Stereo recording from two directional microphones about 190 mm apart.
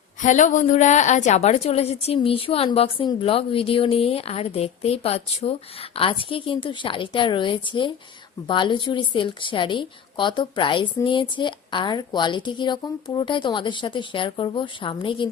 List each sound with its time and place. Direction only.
0.2 s a woman's voice: 40° left (ahead or behind); by 15.3 s 25° left (ahead or behind)